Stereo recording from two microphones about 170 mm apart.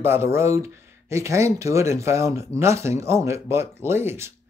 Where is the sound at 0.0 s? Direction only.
15° right (ahead or behind).